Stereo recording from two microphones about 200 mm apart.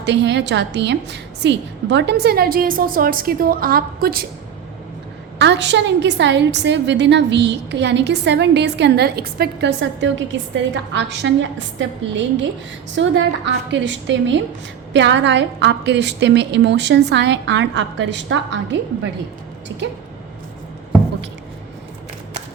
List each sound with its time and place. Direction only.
0.0 s a woman's voice: 60° right (ahead or behind)
5.4 s a woman's voice: 60° right (ahead or behind)